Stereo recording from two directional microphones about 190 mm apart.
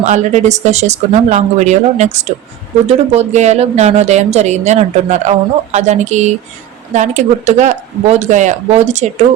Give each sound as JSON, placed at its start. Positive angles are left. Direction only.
{"t": 0.0, "sound": "speech", "side_deg": -40}